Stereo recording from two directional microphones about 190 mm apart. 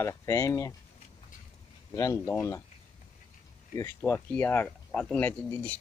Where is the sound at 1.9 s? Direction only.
15° left (ahead or behind).